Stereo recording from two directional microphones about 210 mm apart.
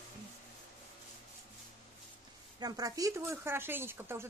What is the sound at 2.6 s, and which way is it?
A woman's voice, 15° right (ahead or behind).